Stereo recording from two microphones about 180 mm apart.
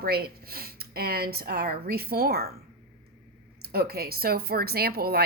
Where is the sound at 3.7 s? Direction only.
60° right (ahead or behind).